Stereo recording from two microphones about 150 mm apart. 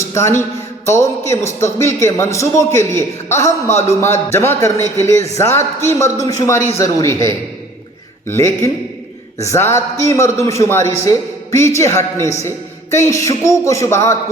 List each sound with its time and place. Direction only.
0.0 s a man's voice: 20° left (ahead or behind)
8.3 s a man's voice: 20° left (ahead or behind)